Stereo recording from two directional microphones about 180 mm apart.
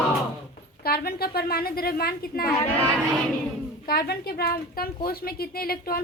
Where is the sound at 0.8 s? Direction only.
60° left (ahead or behind).